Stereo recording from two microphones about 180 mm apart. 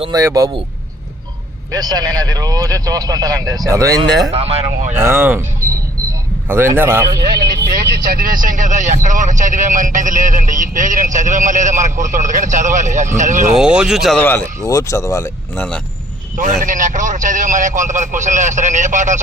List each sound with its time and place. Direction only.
0.0 s speech: 20° right (ahead or behind)
1.7 s speech: 20° right (ahead or behind)
4.3 s speech: 35° right (ahead or behind)
5.0 s a man's voice: 10° right (ahead or behind)
6.5 s a man's voice: 10° right (ahead or behind)
7.8 s speech: 55° right (ahead or behind)
13.6 s speech: 5° right (ahead or behind)
14.2 s speech: 10° left (ahead or behind)
16.4 s speech: 45° right (ahead or behind)